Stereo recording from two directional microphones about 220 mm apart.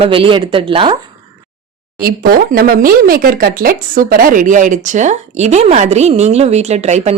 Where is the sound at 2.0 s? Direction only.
40° right (ahead or behind).